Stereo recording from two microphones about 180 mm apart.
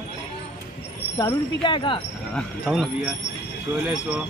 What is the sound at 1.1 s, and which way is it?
Speech, 25° left (ahead or behind).